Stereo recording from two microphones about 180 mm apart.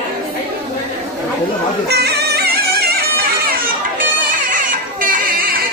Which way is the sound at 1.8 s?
65° right (ahead or behind).